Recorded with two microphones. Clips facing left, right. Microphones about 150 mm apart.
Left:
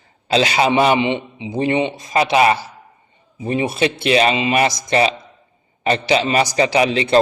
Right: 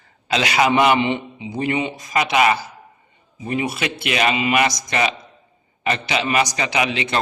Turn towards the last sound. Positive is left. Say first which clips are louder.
# left 7 dB
turn(degrees=35)  # may be behind; listen again after turning